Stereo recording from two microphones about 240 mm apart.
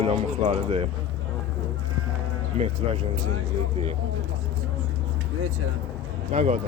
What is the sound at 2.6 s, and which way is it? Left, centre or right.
Speech, right.